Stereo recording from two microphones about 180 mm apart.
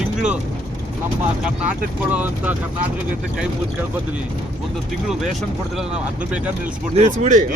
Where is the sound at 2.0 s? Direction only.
10° right (ahead or behind).